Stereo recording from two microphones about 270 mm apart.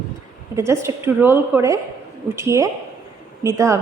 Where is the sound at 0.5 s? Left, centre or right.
Centre.